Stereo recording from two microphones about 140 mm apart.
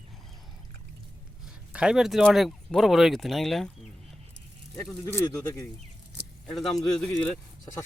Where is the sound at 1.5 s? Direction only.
5° right (ahead or behind).